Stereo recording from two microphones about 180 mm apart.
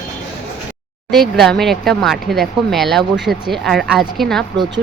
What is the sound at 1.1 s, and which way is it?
Speech, centre (ahead or behind).